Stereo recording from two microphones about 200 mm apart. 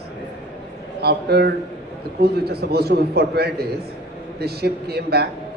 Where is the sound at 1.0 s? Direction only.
55° right (ahead or behind).